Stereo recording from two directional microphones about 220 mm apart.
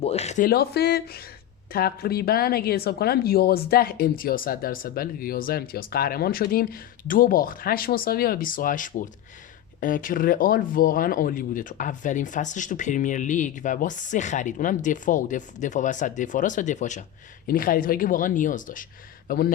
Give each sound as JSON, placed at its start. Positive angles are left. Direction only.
{"t": 0.0, "sound": "speech", "side_deg": 30}